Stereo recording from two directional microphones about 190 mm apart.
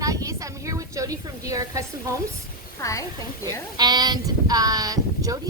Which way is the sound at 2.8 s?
15° left (ahead or behind).